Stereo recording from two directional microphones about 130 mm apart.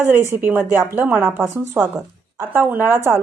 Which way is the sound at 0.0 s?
15° right (ahead or behind).